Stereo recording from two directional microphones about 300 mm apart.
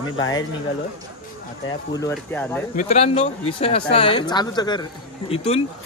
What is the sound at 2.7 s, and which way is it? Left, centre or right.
Speech, centre.